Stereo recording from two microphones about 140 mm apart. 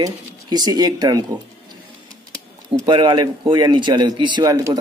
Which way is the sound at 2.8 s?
35° right (ahead or behind).